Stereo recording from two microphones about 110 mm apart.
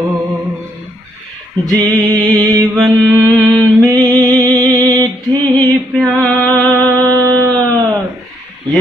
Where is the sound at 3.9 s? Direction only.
15° left (ahead or behind).